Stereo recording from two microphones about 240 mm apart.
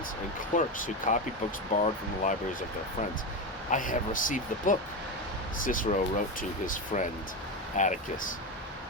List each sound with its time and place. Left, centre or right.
0.5 s speech: left
3.7 s speech: left